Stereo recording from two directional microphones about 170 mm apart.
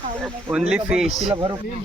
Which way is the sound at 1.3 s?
25° right (ahead or behind).